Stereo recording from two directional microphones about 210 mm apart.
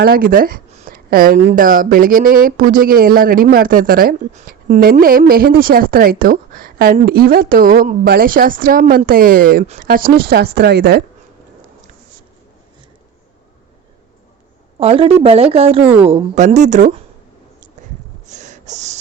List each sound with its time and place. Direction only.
0.0 s speech: 45° right (ahead or behind)
14.8 s speech: 25° right (ahead or behind)
15.8 s speech: 5° right (ahead or behind)
16.0 s speech: 30° right (ahead or behind)
18.3 s gasp: 35° right (ahead or behind)